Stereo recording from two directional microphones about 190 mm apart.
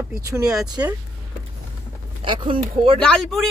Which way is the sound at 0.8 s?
15° right (ahead or behind).